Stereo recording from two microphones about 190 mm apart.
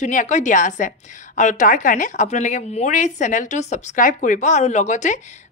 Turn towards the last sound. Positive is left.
turn(degrees=40)  # may be behind; listen again after turning